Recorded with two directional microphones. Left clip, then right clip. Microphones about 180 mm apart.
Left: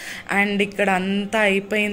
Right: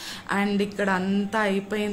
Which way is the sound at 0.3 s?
Centre (ahead or behind).